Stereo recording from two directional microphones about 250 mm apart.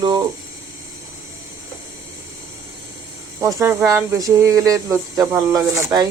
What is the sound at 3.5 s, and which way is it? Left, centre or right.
Speech, centre.